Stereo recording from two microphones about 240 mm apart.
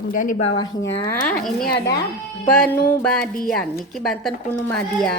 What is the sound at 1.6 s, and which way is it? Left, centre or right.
Speech, left.